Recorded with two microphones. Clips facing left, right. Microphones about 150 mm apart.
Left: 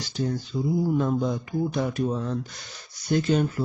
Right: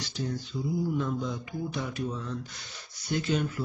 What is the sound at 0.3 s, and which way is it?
Mantra, 40° left (ahead or behind).